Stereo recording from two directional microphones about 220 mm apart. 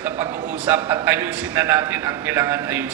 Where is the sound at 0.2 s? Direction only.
10° right (ahead or behind).